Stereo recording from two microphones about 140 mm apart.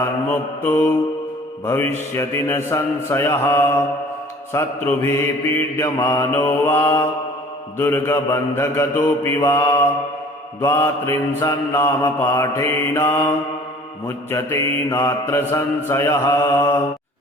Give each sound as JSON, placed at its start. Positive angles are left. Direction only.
{"t": 0.3, "sound": "a man's voice", "side_deg": 10}
{"t": 10.6, "sound": "mantra", "side_deg": 20}